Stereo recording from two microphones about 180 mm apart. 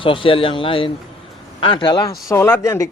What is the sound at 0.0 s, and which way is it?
A man's voice, 30° left (ahead or behind).